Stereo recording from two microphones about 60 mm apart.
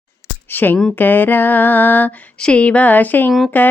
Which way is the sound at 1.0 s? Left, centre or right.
Left.